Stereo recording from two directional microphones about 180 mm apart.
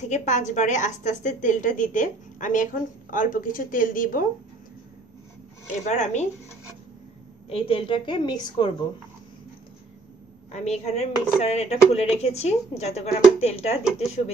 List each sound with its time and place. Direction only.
0.0 s a woman's voice: 40° left (ahead or behind)
5.9 s speech: 40° left (ahead or behind)
7.4 s a woman's voice: 30° left (ahead or behind)
10.5 s speech: 35° left (ahead or behind)